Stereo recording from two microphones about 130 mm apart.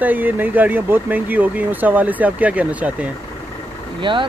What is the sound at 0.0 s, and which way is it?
Speech, 15° right (ahead or behind).